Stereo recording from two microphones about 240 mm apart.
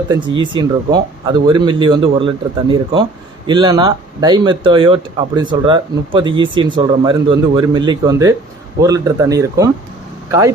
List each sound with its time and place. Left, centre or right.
0.1 s a man's voice: centre